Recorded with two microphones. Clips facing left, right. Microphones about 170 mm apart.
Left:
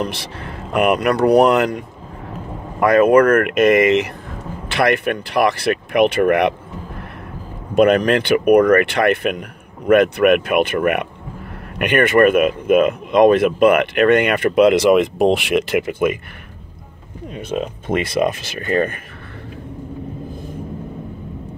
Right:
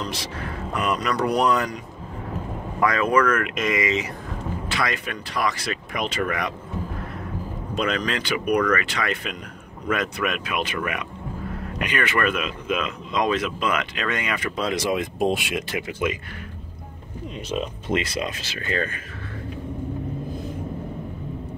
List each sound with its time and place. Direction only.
0.0 s speech: 60° left (ahead or behind)
2.8 s speech: 55° left (ahead or behind)
7.7 s speech: 55° left (ahead or behind)
17.4 s speech: 55° left (ahead or behind)